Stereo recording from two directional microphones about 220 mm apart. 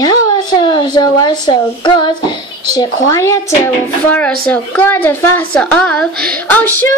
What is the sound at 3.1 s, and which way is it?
A woman's voice, 15° left (ahead or behind).